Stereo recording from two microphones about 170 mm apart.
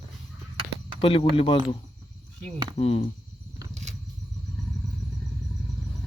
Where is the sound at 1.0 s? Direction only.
30° left (ahead or behind).